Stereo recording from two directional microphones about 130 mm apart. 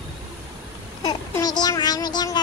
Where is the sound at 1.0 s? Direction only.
30° left (ahead or behind).